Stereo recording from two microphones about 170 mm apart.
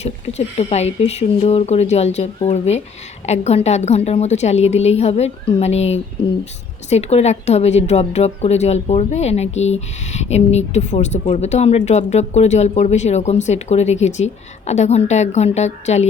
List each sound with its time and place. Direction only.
0.0 s a woman's voice: 40° left (ahead or behind)